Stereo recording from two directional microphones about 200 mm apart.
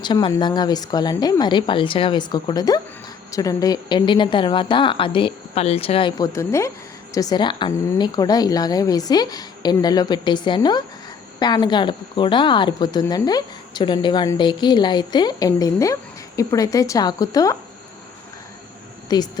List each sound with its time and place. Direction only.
0.0 s a woman's voice: 25° left (ahead or behind)
19.0 s speech: 20° left (ahead or behind)